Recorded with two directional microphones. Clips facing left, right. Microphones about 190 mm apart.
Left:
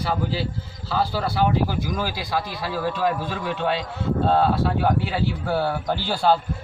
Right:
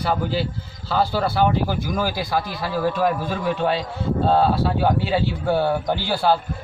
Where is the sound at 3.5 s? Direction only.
35° right (ahead or behind); by 6.3 s 10° right (ahead or behind).